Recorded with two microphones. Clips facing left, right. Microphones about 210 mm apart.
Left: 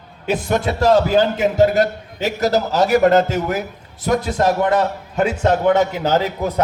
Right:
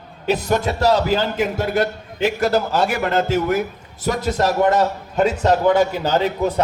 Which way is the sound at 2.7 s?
40° left (ahead or behind).